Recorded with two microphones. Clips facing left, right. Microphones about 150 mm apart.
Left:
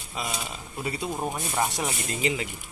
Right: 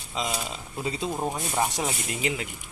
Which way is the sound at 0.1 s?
20° right (ahead or behind).